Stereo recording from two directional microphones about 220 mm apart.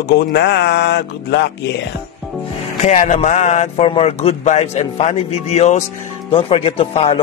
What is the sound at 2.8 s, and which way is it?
A man's voice, 30° left (ahead or behind).